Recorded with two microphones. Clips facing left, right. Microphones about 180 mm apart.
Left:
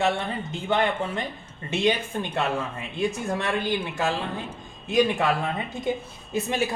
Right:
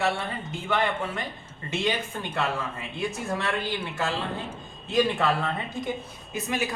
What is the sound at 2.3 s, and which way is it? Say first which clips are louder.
A man's voice: left 1 dB; 20° left (ahead or behind).